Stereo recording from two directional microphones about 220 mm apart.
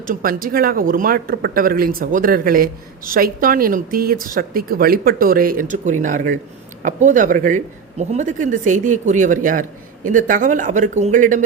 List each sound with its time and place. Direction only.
0.0 s speech: 40° right (ahead or behind)